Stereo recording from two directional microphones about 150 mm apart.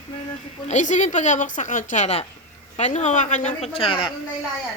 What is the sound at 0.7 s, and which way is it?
A woman's voice, 55° left (ahead or behind).